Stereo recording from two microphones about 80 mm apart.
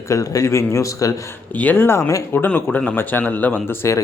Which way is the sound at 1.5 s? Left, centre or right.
Left.